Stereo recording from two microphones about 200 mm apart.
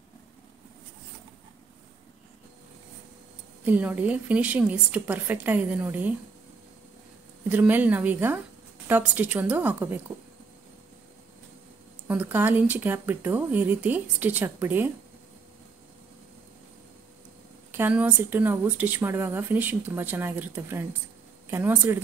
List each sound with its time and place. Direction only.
3.6 s a woman's voice: 10° right (ahead or behind)
7.4 s a woman's voice: 10° right (ahead or behind)
12.1 s a woman's voice: 10° right (ahead or behind)
17.6 s a woman's voice: 10° right (ahead or behind)